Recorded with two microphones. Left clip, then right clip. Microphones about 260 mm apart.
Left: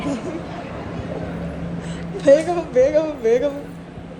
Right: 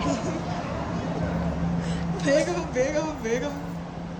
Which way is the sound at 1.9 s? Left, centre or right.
Centre.